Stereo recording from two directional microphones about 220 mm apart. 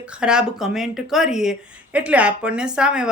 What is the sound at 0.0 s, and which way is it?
Speech, 5° right (ahead or behind).